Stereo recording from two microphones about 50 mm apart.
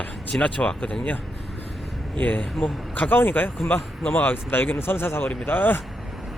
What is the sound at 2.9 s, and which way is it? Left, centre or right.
Speech, left.